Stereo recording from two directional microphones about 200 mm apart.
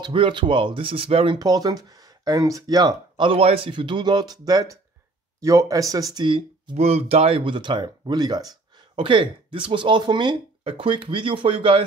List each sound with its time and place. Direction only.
0.0 s speech: 25° right (ahead or behind)